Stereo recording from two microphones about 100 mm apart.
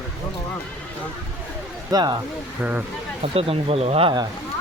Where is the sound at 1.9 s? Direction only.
45° right (ahead or behind).